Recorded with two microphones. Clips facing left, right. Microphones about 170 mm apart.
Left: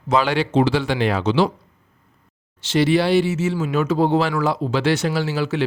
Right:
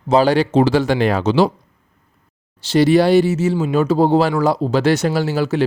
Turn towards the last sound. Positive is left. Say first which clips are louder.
# right 4 dB
turn(degrees=-40)  # may be behind; listen again after turning